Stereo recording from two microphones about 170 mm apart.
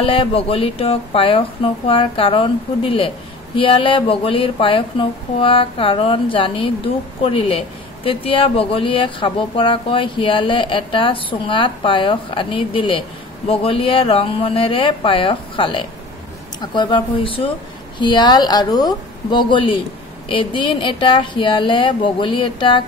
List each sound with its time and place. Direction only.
0.0 s a woman's voice: 30° left (ahead or behind)